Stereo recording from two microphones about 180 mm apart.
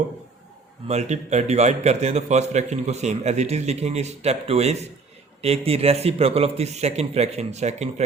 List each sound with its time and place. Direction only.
0.9 s a man's voice: 40° right (ahead or behind)